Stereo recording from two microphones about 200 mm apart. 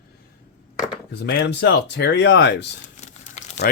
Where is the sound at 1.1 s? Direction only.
55° left (ahead or behind).